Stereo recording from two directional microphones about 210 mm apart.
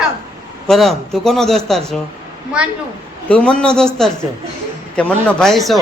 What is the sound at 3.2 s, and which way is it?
Speech, 5° left (ahead or behind).